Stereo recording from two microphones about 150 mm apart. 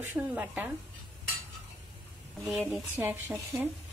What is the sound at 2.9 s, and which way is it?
Speech, 15° right (ahead or behind).